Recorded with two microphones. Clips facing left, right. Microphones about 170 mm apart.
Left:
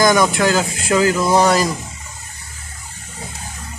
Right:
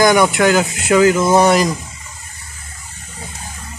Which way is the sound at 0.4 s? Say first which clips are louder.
Right 3 dB; 20° right (ahead or behind).